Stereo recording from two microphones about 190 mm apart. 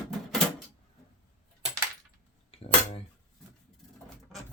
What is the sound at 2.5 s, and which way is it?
Cutlery, 30° left (ahead or behind).